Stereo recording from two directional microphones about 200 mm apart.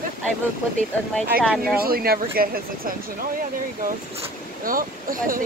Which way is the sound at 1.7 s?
50° right (ahead or behind).